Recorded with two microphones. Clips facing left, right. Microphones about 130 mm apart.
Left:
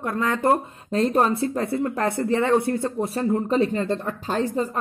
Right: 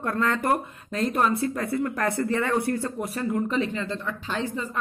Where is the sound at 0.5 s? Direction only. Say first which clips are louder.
Left 4 dB; 30° left (ahead or behind).